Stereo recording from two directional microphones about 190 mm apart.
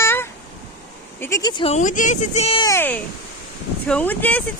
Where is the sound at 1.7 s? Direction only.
40° left (ahead or behind).